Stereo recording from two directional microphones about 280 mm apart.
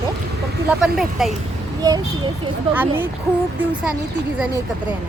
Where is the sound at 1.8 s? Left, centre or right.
Centre.